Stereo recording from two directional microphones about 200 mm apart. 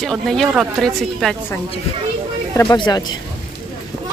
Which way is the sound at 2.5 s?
20° left (ahead or behind).